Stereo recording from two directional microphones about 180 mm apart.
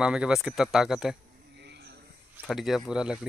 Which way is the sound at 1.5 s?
70° right (ahead or behind).